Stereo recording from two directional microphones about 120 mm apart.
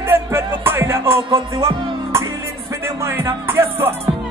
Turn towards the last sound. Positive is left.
turn(degrees=-20)  # may be behind; listen again after turning